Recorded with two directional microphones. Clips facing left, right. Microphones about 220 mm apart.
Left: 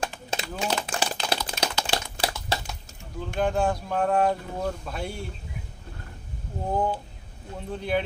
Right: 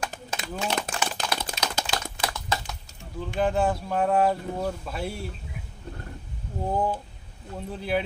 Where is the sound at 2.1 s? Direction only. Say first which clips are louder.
Left 1 dB; 30° left (ahead or behind).